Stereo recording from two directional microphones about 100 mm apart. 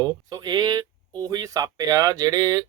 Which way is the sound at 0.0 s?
40° right (ahead or behind).